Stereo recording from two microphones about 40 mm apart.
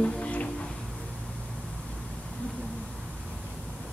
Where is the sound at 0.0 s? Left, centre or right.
Left.